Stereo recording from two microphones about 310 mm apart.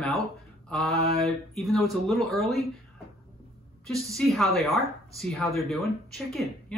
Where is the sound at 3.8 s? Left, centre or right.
Centre.